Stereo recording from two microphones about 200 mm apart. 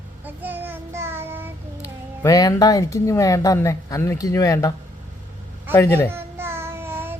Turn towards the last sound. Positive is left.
turn(degrees=-10)  # may be behind; listen again after turning